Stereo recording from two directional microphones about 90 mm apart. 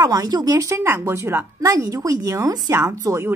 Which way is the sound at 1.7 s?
40° right (ahead or behind).